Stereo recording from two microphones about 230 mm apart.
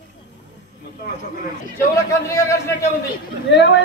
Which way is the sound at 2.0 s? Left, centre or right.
Centre.